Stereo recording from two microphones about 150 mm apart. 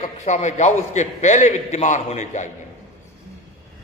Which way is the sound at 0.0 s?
50° left (ahead or behind).